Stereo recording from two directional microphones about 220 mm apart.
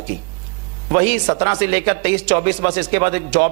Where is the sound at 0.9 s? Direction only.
20° right (ahead or behind).